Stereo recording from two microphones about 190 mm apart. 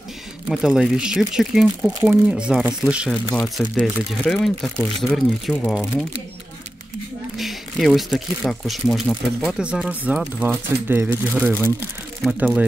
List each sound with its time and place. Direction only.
0.5 s speech: centre (ahead or behind)
7.3 s speech: centre (ahead or behind)